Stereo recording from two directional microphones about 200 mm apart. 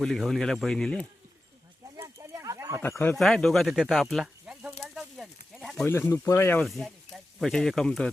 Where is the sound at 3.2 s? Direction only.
Centre (ahead or behind).